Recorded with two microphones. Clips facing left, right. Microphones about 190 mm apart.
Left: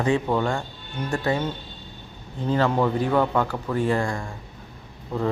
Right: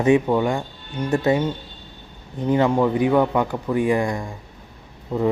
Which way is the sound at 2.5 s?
15° right (ahead or behind).